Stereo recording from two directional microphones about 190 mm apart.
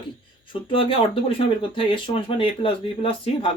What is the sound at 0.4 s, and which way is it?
Speech, 25° left (ahead or behind).